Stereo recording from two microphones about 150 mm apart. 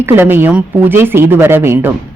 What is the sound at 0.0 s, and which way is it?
A woman's voice, 15° right (ahead or behind).